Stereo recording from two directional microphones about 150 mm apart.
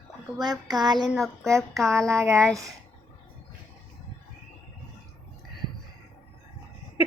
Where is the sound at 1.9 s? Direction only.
20° right (ahead or behind).